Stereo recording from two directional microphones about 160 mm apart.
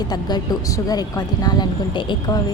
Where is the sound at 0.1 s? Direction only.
25° left (ahead or behind).